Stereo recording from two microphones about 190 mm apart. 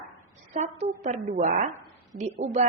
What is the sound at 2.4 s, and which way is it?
Speech, 35° right (ahead or behind).